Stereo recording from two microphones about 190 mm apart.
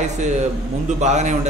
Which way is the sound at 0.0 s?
40° right (ahead or behind).